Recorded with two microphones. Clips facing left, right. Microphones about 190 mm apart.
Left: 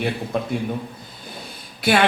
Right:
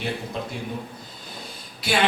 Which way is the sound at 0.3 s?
55° left (ahead or behind).